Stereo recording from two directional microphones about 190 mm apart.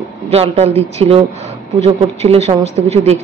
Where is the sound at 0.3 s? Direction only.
35° right (ahead or behind).